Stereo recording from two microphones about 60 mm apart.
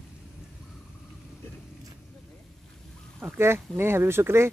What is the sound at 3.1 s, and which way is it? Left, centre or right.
Speech, right.